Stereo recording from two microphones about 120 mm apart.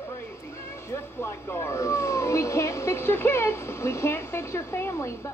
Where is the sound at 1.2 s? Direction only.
20° left (ahead or behind).